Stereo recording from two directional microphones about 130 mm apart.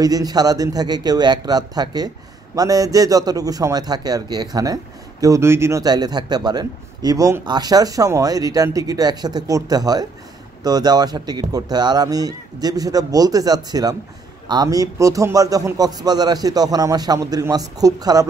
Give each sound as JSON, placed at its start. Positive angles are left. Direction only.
{"t": 0.0, "sound": "a man's voice", "side_deg": -30}